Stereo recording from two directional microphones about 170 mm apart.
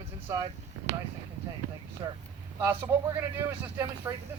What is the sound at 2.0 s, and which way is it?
Speech, 25° right (ahead or behind).